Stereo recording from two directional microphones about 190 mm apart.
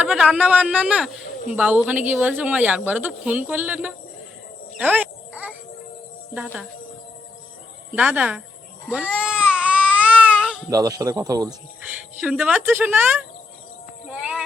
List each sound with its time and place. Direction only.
0.0 s speech: 5° right (ahead or behind)
4.8 s music: 10° right (ahead or behind)
6.3 s speech: 5° right (ahead or behind)
7.9 s speech: 10° right (ahead or behind)
8.9 s baby cry: 5° right (ahead or behind)
10.7 s speech: 20° right (ahead or behind)
12.2 s speech: 10° right (ahead or behind)
14.1 s clip-clop: 5° right (ahead or behind)